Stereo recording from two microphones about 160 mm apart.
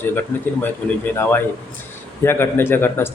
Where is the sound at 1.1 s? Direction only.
15° left (ahead or behind).